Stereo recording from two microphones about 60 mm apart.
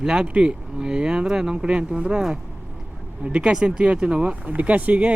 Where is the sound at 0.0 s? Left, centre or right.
Centre.